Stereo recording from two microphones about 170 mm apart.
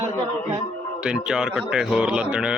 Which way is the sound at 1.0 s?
5° right (ahead or behind).